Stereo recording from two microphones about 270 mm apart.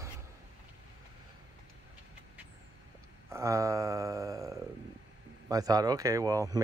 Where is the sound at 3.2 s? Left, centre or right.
Centre.